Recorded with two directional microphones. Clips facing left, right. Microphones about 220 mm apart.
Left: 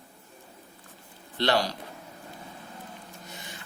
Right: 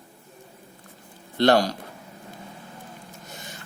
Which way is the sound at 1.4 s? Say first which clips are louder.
Right 7 dB; 45° right (ahead or behind).